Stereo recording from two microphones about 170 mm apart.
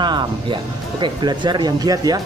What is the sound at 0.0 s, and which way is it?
Speech, 25° right (ahead or behind).